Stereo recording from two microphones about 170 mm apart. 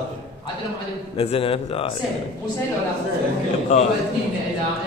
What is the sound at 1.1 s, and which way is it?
Throat clearing, 35° left (ahead or behind).